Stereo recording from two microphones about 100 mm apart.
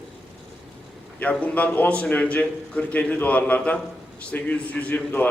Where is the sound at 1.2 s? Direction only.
15° left (ahead or behind).